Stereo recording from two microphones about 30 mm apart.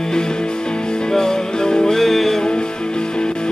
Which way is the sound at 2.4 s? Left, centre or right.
Left.